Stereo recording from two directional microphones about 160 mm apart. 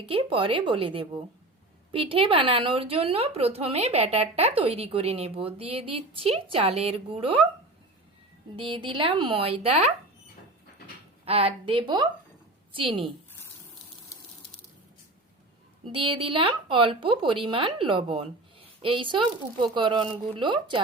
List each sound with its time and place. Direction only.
0.0 s a woman's voice: 35° right (ahead or behind)
8.5 s a woman's voice: 30° right (ahead or behind)
11.3 s a woman's voice: 35° right (ahead or behind)
15.9 s a woman's voice: 35° right (ahead or behind)